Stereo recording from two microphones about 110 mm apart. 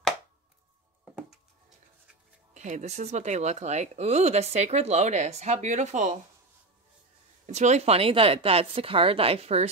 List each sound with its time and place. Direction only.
2.5 s speech: 90° right
7.4 s a woman's voice: 90° right; by 9.7 s 65° right (ahead or behind)